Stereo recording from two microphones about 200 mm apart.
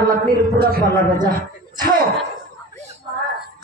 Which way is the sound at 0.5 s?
45° right (ahead or behind).